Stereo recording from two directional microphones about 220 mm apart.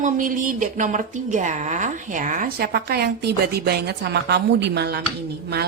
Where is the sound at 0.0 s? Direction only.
35° right (ahead or behind).